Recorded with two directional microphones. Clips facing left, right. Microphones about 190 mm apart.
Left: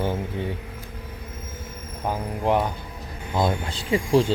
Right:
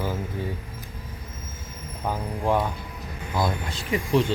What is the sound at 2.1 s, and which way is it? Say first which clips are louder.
Speech: left 2 dB; 15° left (ahead or behind).